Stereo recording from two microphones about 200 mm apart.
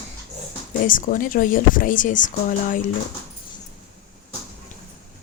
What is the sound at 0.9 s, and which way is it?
Speech, 40° left (ahead or behind).